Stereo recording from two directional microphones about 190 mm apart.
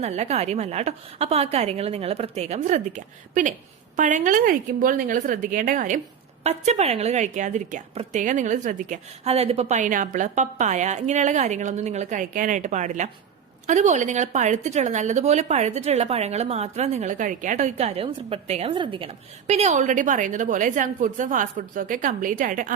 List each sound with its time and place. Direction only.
0.0 s a woman's voice: 35° right (ahead or behind)